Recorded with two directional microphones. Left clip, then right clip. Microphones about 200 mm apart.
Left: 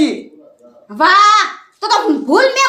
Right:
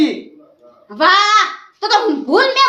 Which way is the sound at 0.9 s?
40° left (ahead or behind).